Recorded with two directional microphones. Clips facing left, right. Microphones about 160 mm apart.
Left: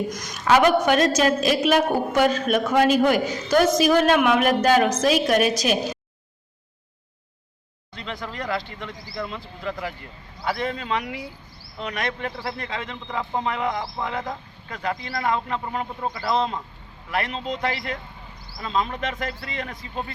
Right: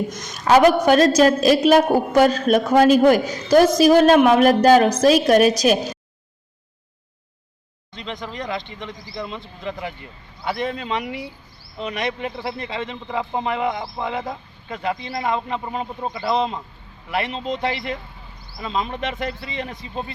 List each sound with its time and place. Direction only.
0.4 s a woman's voice: 40° right (ahead or behind)
8.4 s speech: 20° right (ahead or behind)
13.1 s a man's voice: 5° right (ahead or behind)
13.4 s speech: 20° right (ahead or behind)
17.6 s speech: 25° right (ahead or behind)